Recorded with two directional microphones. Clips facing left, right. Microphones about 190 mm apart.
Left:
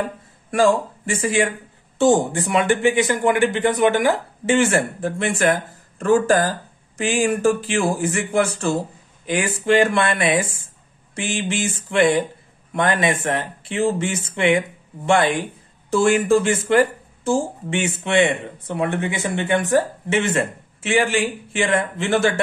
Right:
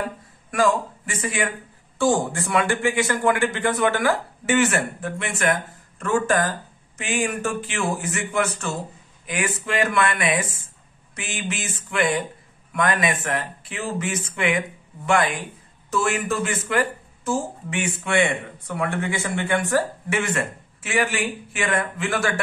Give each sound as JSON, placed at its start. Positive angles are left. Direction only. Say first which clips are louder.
{"t": 0.5, "sound": "speech", "louder": "left 4 dB", "side_deg": 30}